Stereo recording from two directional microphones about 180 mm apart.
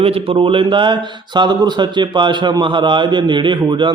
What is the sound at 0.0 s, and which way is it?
A man's voice, 30° right (ahead or behind).